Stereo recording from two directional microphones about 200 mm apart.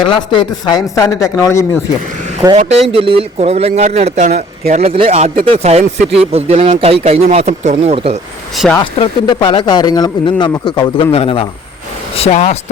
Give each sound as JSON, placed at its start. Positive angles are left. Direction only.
{"t": 0.0, "sound": "speech", "side_deg": 25}
{"t": 2.6, "sound": "speech", "side_deg": -35}
{"t": 8.5, "sound": "speech", "side_deg": 0}
{"t": 8.8, "sound": "speech", "side_deg": 25}